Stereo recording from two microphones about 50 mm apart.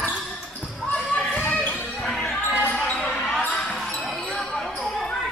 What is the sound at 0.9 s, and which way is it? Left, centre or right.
Basketball bounce, left.